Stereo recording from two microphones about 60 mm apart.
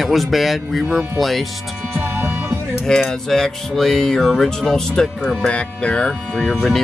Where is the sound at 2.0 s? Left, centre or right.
Right.